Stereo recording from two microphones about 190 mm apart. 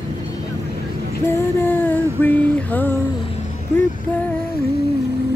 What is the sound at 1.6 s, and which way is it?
Female singing, 10° left (ahead or behind).